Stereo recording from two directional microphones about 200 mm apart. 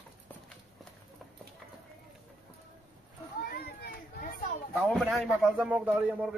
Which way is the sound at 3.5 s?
50° left (ahead or behind).